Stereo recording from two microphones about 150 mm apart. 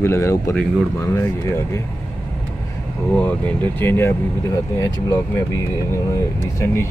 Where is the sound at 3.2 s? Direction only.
10° left (ahead or behind).